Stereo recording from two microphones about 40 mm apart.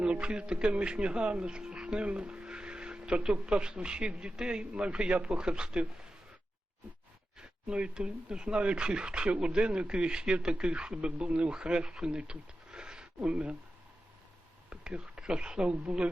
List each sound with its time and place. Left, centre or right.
0.0 s speech: right
4.6 s speech: right
8.0 s speech: right
12.0 s a sound: right
13.2 s speech: right
14.7 s a sound: right
15.2 s speech: right